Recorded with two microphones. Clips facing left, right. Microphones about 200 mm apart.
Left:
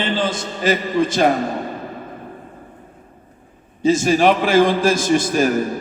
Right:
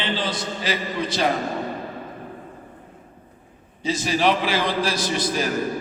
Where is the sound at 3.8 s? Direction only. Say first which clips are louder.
Left 7 dB; 50° left (ahead or behind).